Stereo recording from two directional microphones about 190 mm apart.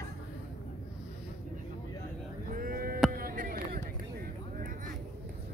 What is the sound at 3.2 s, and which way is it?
Music, 50° right (ahead or behind).